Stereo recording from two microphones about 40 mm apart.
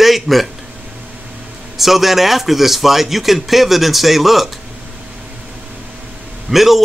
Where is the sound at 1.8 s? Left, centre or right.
Centre.